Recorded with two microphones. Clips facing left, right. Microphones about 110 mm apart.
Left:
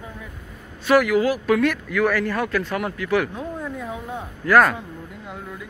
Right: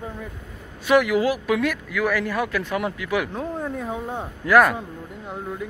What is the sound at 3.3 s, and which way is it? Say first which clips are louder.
Speech: right 2 dB; 25° right (ahead or behind).